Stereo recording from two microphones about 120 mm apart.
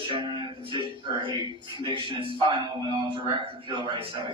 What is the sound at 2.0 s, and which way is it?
A man's voice, 45° right (ahead or behind).